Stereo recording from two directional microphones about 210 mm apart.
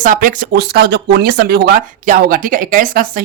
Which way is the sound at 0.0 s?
40° right (ahead or behind).